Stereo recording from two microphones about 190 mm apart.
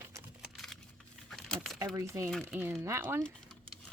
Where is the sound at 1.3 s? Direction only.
5° left (ahead or behind).